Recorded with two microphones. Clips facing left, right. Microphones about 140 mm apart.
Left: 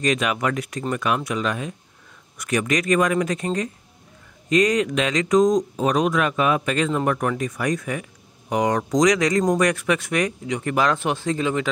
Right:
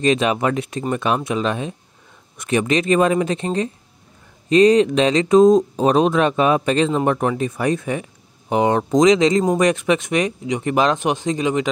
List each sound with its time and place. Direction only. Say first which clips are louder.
0.0 s speech: right 5 dB; 30° right (ahead or behind)